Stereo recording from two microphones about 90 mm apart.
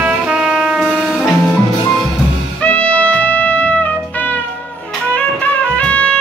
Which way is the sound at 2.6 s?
15° left (ahead or behind).